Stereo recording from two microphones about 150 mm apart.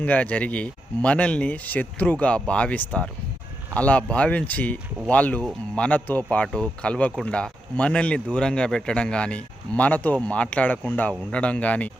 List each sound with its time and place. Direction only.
0.0 s speech: 10° left (ahead or behind)